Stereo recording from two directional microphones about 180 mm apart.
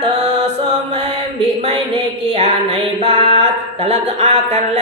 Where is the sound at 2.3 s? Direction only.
35° right (ahead or behind).